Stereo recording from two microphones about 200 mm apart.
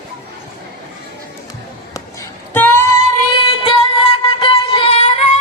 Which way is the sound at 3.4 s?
25° left (ahead or behind).